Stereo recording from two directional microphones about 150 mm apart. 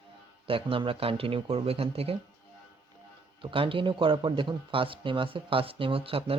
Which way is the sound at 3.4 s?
35° right (ahead or behind).